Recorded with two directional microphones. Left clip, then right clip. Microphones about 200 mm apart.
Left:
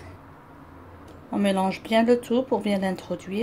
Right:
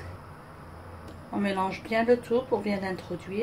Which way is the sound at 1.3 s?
45° left (ahead or behind).